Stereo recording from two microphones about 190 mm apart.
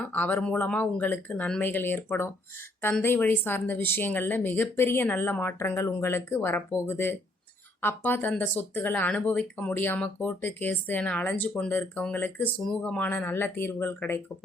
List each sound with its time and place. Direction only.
0.1 s speech: 10° left (ahead or behind)